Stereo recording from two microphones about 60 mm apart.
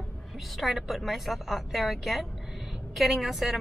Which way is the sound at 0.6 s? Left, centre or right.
Centre.